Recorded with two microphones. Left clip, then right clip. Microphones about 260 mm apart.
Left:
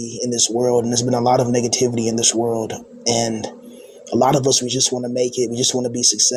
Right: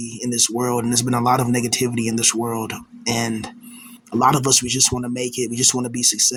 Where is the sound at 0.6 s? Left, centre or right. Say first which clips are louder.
Left 4 dB; right.